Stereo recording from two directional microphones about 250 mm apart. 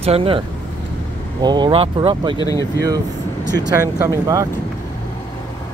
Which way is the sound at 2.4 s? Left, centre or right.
Centre.